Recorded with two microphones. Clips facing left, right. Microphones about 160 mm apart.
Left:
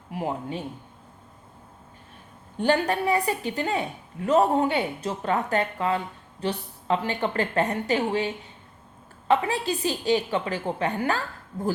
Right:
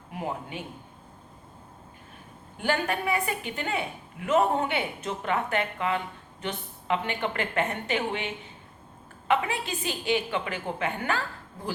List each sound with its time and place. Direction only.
0.1 s a man's voice: 30° left (ahead or behind)
2.6 s a woman's voice: 35° left (ahead or behind)